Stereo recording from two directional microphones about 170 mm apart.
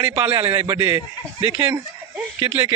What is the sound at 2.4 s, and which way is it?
Speech, 15° right (ahead or behind).